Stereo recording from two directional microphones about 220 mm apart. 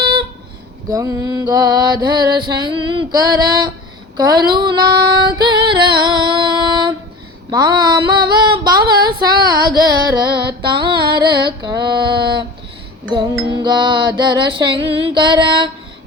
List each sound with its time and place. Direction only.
0.0 s a sound: 20° right (ahead or behind)
0.9 s mantra: 15° right (ahead or behind)
4.2 s female singing: 20° right (ahead or behind)
13.1 s music: 20° right (ahead or behind)